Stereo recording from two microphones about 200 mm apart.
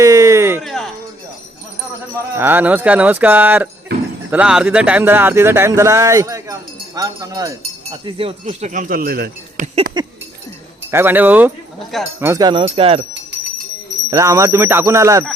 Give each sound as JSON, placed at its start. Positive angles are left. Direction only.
{"t": 0.0, "sound": "a sound", "side_deg": -15}
{"t": 0.6, "sound": "music", "side_deg": 0}
{"t": 2.3, "sound": "speech", "side_deg": -10}
{"t": 8.0, "sound": "speech", "side_deg": -25}
{"t": 8.4, "sound": "speech", "side_deg": -40}
{"t": 10.0, "sound": "speech", "side_deg": -20}
{"t": 10.9, "sound": "speech", "side_deg": -10}
{"t": 12.2, "sound": "speech", "side_deg": -15}
{"t": 14.1, "sound": "speech", "side_deg": -15}